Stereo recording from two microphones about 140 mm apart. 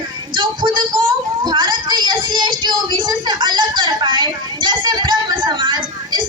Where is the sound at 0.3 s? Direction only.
30° right (ahead or behind).